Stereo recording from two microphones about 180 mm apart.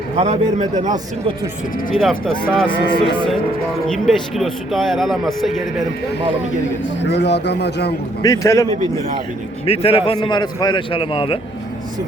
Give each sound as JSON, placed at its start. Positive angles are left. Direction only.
{"t": 0.2, "sound": "a man's voice", "side_deg": -40}
{"t": 2.0, "sound": "speech", "side_deg": 0}
{"t": 7.0, "sound": "a man's voice", "side_deg": 70}
{"t": 8.2, "sound": "a man's voice", "side_deg": 15}
{"t": 9.6, "sound": "a man's voice", "side_deg": 35}